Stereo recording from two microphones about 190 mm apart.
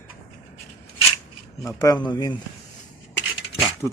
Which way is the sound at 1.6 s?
20° left (ahead or behind).